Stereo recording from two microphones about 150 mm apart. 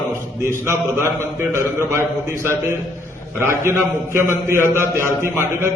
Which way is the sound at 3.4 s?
15° right (ahead or behind).